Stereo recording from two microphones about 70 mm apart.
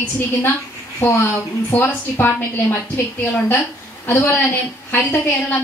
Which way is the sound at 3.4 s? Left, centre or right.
Left.